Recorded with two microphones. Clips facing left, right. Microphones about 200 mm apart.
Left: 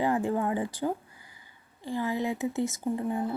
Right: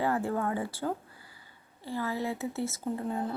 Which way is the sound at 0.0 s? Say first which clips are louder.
Left 2 dB; 15° left (ahead or behind).